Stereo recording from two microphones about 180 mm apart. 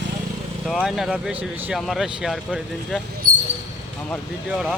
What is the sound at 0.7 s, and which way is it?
Speech, centre (ahead or behind).